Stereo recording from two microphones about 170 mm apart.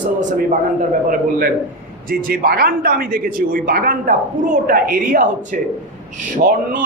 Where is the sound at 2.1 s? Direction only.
55° right (ahead or behind).